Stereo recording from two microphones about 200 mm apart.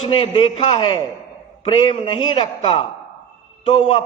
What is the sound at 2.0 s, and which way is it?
A man's voice, 25° left (ahead or behind).